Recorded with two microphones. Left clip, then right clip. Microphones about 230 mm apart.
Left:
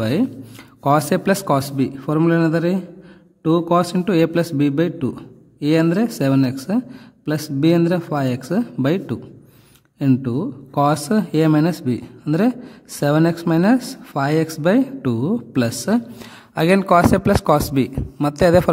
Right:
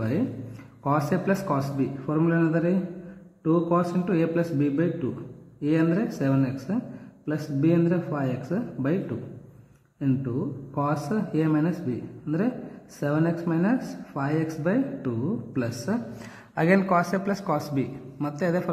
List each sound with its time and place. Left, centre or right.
0.8 s a man's voice: left